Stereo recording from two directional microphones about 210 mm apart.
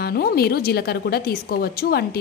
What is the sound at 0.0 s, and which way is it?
A woman's voice, 45° left (ahead or behind).